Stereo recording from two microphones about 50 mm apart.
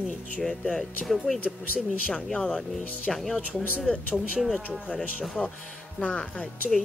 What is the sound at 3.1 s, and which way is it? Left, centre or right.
Speech, centre.